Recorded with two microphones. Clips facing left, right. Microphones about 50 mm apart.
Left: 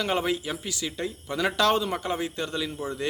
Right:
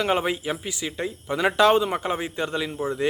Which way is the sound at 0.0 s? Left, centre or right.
Right.